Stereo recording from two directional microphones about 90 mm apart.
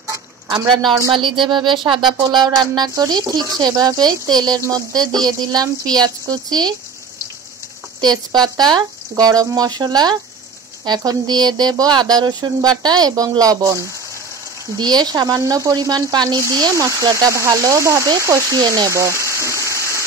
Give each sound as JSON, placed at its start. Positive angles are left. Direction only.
{"t": 1.1, "sound": "speech", "side_deg": -65}
{"t": 8.0, "sound": "speech", "side_deg": -55}
{"t": 16.7, "sound": "speech", "side_deg": -35}
{"t": 18.9, "sound": "a sound", "side_deg": -35}